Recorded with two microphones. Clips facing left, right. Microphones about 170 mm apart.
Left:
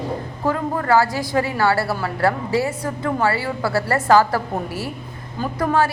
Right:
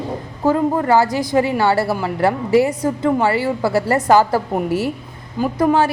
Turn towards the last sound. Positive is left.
turn(degrees=-20)  # may be behind; listen again after turning